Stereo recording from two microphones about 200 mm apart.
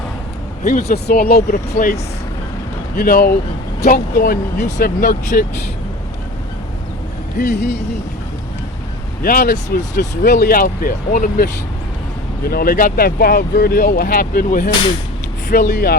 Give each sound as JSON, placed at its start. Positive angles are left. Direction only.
{"t": 0.6, "sound": "speech", "side_deg": 45}
{"t": 9.2, "sound": "speech", "side_deg": 45}
{"t": 12.5, "sound": "speech", "side_deg": 50}